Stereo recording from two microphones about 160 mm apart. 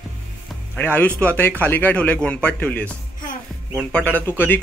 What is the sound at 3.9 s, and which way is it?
Speech, 10° left (ahead or behind).